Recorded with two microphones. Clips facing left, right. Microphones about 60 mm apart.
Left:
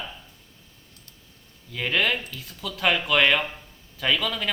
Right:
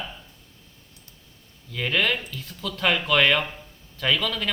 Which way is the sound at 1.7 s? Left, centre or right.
Centre.